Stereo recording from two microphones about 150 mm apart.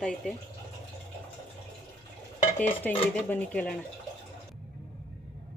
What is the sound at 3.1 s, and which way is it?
Speech, 10° left (ahead or behind).